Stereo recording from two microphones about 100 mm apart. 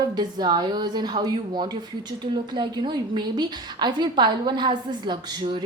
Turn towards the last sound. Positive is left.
turn(degrees=-50)  # may be behind; listen again after turning